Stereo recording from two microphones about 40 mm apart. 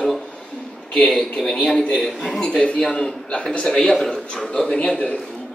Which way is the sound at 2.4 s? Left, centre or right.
Left.